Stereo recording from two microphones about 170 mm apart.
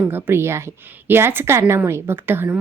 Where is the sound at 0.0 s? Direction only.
10° right (ahead or behind).